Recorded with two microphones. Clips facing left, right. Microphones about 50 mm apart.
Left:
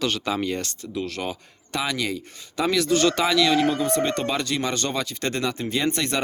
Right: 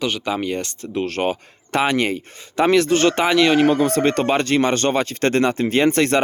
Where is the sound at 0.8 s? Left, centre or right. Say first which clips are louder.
Right 7 dB; right.